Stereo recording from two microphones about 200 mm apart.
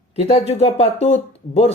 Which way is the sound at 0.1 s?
30° left (ahead or behind).